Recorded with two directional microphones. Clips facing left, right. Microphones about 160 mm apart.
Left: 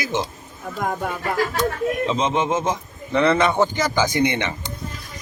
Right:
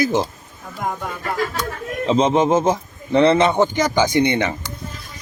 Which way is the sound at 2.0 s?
35° right (ahead or behind).